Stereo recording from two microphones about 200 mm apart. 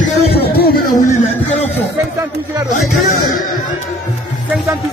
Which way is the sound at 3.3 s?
40° left (ahead or behind).